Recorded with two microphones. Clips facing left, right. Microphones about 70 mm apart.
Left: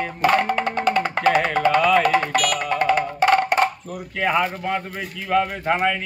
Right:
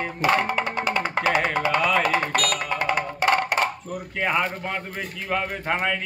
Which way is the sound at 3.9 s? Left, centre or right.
Centre.